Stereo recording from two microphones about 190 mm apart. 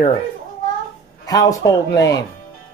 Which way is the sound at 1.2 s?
20° left (ahead or behind).